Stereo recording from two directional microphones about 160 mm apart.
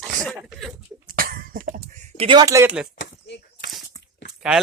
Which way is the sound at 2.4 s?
20° right (ahead or behind).